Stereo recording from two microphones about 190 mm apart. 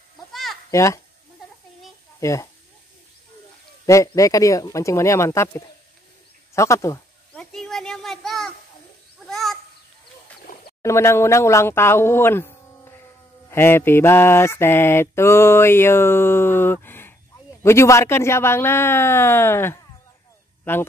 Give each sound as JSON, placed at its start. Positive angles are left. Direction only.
{"t": 0.3, "sound": "sheep", "side_deg": 0}
{"t": 0.7, "sound": "speech", "side_deg": 15}
{"t": 2.1, "sound": "speech", "side_deg": 15}
{"t": 3.8, "sound": "mantra", "side_deg": 15}
{"t": 6.5, "sound": "a sound", "side_deg": 15}
{"t": 7.5, "sound": "a sound", "side_deg": 0}
{"t": 10.8, "sound": "mantra", "side_deg": 15}
{"t": 13.5, "sound": "mantra", "side_deg": 15}